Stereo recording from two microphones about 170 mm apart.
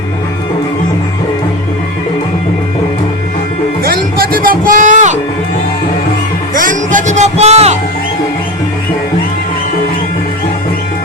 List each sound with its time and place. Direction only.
3.8 s music: 60° right (ahead or behind)
6.5 s music: 50° right (ahead or behind)